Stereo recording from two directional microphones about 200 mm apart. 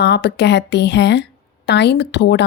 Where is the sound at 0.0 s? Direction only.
55° left (ahead or behind).